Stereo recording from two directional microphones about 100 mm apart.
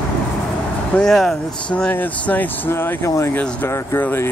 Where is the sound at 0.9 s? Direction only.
5° left (ahead or behind).